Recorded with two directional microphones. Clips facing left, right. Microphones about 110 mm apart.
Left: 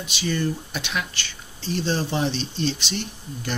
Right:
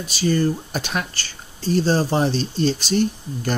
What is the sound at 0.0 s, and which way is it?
Speech, 40° right (ahead or behind).